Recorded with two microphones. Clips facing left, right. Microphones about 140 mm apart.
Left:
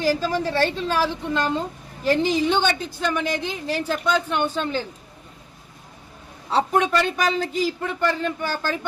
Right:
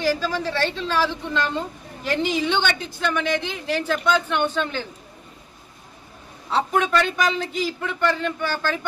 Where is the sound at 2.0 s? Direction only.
35° left (ahead or behind).